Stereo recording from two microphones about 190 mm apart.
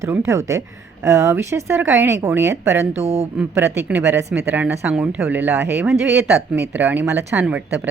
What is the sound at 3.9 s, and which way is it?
A woman's voice, 10° right (ahead or behind).